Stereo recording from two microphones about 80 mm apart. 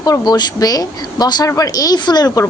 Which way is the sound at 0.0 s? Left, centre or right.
Left.